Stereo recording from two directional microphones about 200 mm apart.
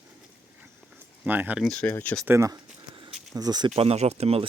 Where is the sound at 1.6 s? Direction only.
5° left (ahead or behind).